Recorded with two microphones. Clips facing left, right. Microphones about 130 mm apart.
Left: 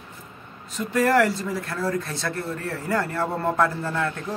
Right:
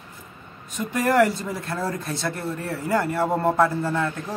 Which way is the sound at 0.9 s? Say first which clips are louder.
Even; 15° right (ahead or behind).